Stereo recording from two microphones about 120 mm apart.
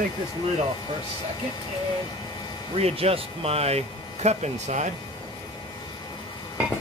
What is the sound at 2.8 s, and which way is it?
Speech, 60° right (ahead or behind).